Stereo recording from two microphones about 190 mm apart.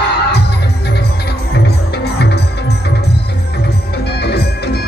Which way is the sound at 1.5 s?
60° left (ahead or behind).